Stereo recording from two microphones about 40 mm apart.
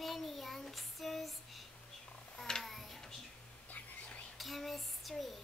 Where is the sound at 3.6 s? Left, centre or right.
Left.